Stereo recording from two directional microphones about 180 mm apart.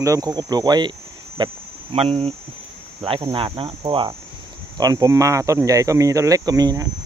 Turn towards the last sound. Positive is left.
turn(degrees=-20)  # may be behind; listen again after turning